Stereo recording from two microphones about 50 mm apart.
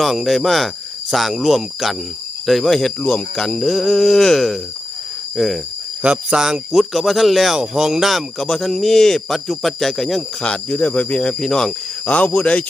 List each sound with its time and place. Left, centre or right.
0.0 s speech: centre
2.5 s a sound: centre
3.0 s speech: left
3.4 s a sound: centre
5.4 s speech: centre
6.3 s speech: centre
6.9 s speech: centre
8.4 s speech: centre
10.4 s speech: left
11.2 s a sound: centre
12.0 s speech: left